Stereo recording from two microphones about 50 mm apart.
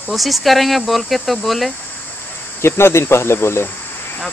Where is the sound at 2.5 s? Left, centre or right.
Left.